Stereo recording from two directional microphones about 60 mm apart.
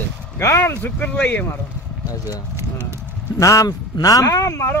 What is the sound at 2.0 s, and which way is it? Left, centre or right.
Speech, left.